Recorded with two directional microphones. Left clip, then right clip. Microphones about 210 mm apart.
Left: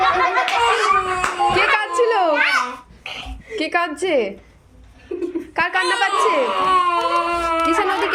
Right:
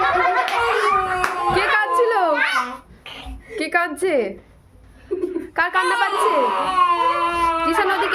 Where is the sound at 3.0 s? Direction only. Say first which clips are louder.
Left 5 dB; 40° left (ahead or behind).